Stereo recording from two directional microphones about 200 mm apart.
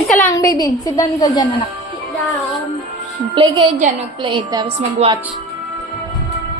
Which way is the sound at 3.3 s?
25° right (ahead or behind).